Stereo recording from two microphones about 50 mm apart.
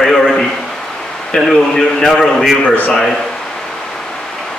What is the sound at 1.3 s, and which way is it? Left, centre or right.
A man's voice, left.